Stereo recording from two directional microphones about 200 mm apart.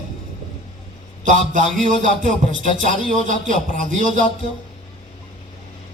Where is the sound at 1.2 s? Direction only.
40° right (ahead or behind).